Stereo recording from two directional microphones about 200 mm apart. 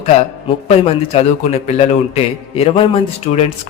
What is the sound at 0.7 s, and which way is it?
A man's voice, 30° left (ahead or behind).